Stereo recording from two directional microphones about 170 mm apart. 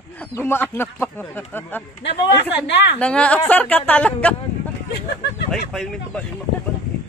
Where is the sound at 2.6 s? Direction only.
90° left.